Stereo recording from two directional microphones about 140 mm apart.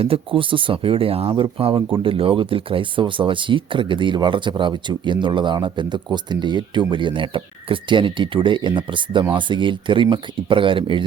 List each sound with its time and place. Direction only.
0.0 s speech: 40° right (ahead or behind)